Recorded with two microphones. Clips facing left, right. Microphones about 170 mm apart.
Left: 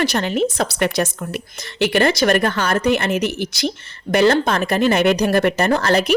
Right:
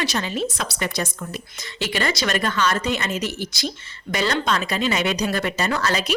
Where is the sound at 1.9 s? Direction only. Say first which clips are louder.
Left 8 dB; 55° left (ahead or behind).